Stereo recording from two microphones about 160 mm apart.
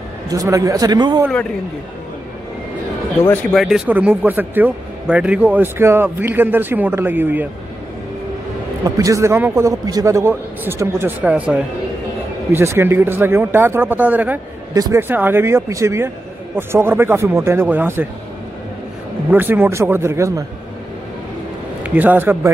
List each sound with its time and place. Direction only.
0.3 s a man's voice: 20° right (ahead or behind)
3.5 s speech: centre (ahead or behind)
8.8 s speech: 20° right (ahead or behind)
14.7 s speech: 20° right (ahead or behind)
19.3 s speech: 10° right (ahead or behind)
21.8 s speech: 10° right (ahead or behind)